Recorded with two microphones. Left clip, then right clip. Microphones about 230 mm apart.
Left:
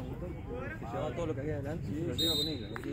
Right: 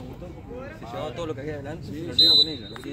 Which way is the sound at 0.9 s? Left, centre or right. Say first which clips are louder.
Right 5 dB; right.